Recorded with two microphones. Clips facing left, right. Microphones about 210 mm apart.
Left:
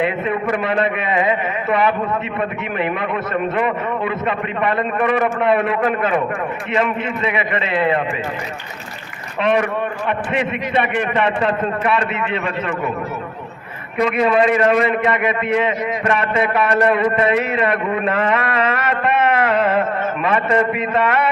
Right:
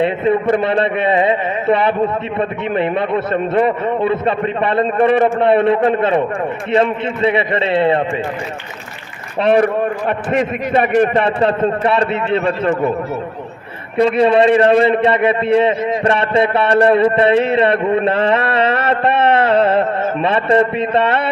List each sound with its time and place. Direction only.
0.0 s a man's voice: 30° right (ahead or behind)
9.4 s a man's voice: 35° right (ahead or behind)
13.9 s a man's voice: 30° right (ahead or behind)